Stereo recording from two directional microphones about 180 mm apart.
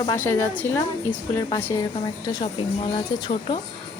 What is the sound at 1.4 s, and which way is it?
Speech, 25° left (ahead or behind).